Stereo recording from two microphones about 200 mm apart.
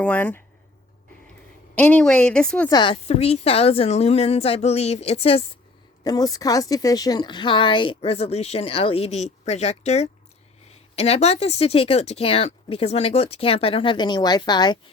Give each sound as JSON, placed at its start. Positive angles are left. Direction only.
{"t": 0.0, "sound": "speech", "side_deg": 5}
{"t": 1.7, "sound": "a woman's voice", "side_deg": 10}
{"t": 2.6, "sound": "a woman's voice", "side_deg": 20}
{"t": 6.1, "sound": "speech", "side_deg": 20}